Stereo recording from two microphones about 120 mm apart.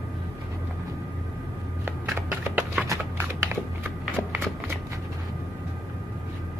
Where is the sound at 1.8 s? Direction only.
15° right (ahead or behind).